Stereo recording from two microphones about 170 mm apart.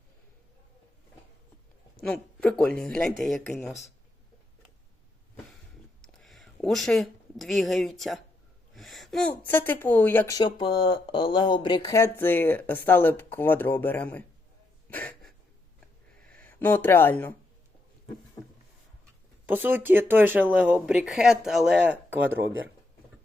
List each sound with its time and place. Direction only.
2.0 s speech: 5° left (ahead or behind)
6.0 s speech: centre (ahead or behind)
10.3 s speech: 30° left (ahead or behind); by 14.3 s 10° left (ahead or behind)
14.8 s a sound: 10° left (ahead or behind)
16.3 s speech: 10° left (ahead or behind)
19.5 s speech: 10° right (ahead or behind)